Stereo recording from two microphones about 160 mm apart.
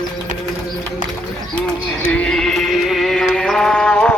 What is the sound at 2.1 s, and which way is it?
Music, 5° left (ahead or behind).